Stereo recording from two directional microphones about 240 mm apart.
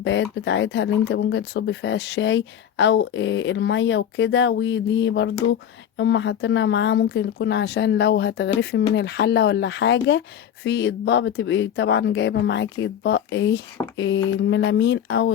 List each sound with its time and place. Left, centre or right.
0.0 s speech: left